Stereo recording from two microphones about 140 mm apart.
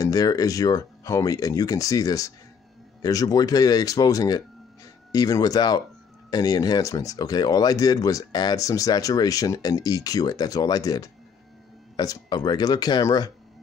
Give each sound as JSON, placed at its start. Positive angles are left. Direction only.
{"t": 0.0, "sound": "speech", "side_deg": 25}